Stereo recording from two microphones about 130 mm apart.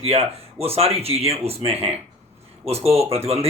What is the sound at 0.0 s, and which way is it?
Speech, 50° right (ahead or behind).